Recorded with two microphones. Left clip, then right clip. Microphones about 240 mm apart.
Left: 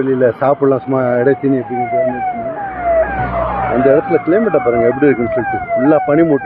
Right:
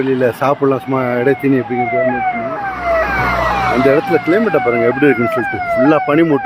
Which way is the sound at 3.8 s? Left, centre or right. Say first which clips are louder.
Left 3 dB; centre.